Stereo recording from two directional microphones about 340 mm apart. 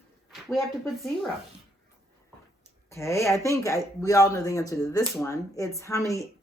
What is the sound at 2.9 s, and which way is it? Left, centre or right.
Speech, centre.